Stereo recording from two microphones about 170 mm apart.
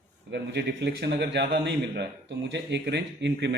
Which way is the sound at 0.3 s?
85° right.